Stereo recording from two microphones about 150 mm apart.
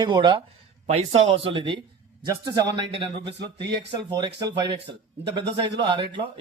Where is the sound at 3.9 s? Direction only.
30° right (ahead or behind).